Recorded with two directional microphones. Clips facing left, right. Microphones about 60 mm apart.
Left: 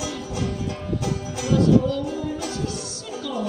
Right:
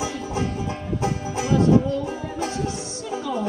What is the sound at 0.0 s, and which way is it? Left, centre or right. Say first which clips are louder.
Music: right 2 dB; right.